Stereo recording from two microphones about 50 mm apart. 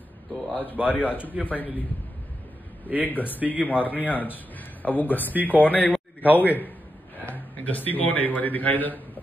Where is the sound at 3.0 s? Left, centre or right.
Left.